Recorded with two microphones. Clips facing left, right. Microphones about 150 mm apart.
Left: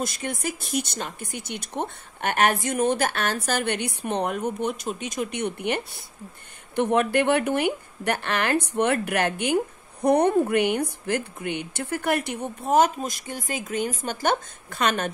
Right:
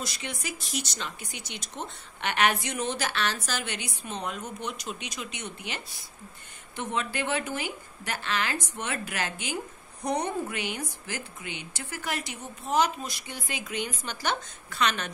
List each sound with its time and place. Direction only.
0.0 s speech: 50° left (ahead or behind)